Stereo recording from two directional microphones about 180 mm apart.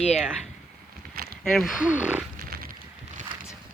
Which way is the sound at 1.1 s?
55° right (ahead or behind).